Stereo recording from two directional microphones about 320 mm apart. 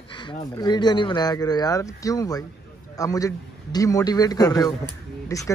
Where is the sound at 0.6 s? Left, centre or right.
Centre.